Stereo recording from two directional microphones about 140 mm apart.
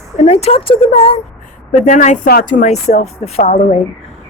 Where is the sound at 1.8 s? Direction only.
60° left (ahead or behind).